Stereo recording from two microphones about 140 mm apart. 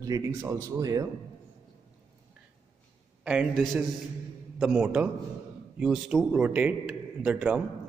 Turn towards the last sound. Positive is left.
turn(degrees=-10)  # may be behind; listen again after turning